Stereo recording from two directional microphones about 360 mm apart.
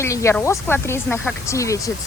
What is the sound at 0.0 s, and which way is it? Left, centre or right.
Speech, centre.